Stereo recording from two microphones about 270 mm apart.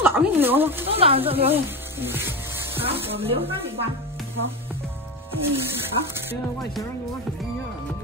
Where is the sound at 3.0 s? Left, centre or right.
Right.